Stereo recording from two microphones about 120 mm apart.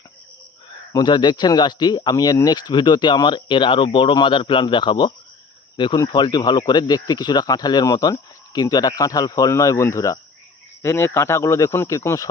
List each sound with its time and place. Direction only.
0.9 s speech: 40° left (ahead or behind)